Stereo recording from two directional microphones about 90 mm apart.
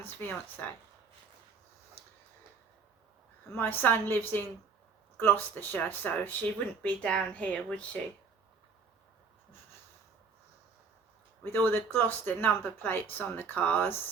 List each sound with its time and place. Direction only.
0.0 s speech: 20° left (ahead or behind)
3.5 s speech: 20° left (ahead or behind)
11.5 s speech: 25° left (ahead or behind)